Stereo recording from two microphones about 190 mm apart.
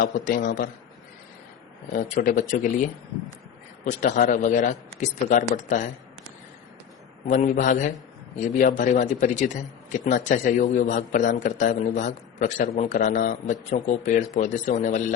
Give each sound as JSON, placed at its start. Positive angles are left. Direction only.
{"t": 0.0, "sound": "speech", "side_deg": 45}
{"t": 1.9, "sound": "a man's voice", "side_deg": 45}
{"t": 7.3, "sound": "a man's voice", "side_deg": 40}